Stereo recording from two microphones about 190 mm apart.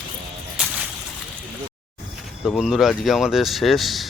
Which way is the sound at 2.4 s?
5° left (ahead or behind).